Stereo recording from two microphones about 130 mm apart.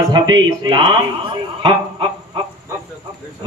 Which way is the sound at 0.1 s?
35° right (ahead or behind).